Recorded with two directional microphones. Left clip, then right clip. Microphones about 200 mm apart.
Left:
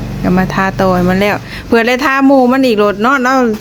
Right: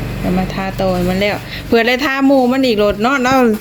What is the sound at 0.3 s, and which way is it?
Speech, 20° left (ahead or behind).